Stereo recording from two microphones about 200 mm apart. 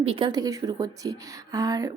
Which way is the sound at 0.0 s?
25° right (ahead or behind).